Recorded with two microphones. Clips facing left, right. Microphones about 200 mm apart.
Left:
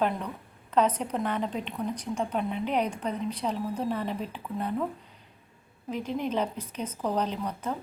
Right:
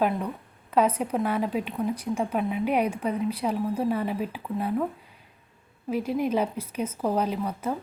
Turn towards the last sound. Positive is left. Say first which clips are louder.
# right 4 dB
turn(degrees=-10)  # may be behind; listen again after turning